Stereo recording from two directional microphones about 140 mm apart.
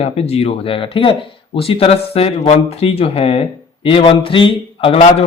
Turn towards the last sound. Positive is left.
turn(degrees=40)  # may be behind; listen again after turning